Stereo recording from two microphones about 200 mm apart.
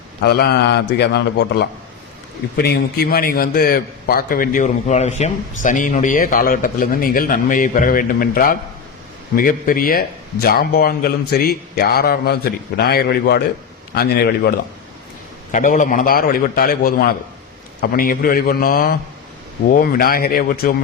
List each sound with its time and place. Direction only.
0.2 s a man's voice: 55° left (ahead or behind)
15.5 s a man's voice: 40° left (ahead or behind)